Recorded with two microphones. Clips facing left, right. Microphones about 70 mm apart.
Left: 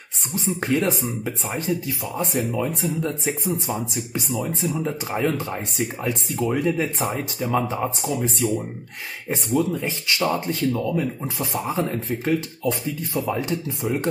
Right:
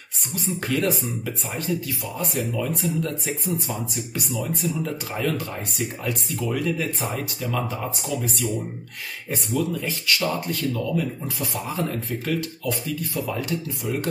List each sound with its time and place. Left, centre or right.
0.6 s speech: left